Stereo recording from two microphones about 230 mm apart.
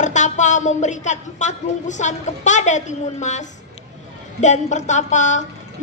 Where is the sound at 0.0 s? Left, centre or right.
Left.